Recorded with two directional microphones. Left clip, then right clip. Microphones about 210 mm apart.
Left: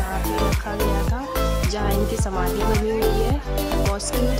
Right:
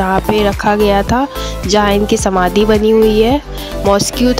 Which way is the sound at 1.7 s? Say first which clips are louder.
Right 13 dB; 40° right (ahead or behind).